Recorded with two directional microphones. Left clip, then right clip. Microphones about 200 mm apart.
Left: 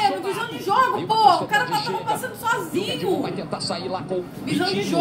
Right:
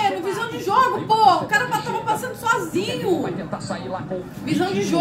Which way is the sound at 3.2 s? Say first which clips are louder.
Even; 35° left (ahead or behind).